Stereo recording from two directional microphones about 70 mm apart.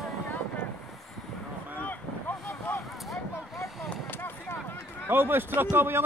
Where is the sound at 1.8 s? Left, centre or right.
Left.